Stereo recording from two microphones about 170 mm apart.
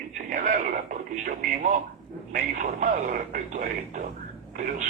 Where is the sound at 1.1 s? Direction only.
50° right (ahead or behind).